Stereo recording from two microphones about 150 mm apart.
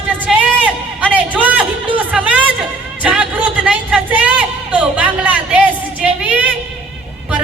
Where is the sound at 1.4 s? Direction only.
10° right (ahead or behind).